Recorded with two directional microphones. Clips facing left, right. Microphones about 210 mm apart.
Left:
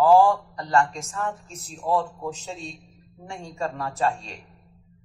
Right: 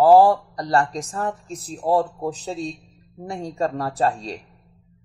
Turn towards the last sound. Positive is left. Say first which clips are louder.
# right 3 dB
turn(degrees=-35)  # may be behind; listen again after turning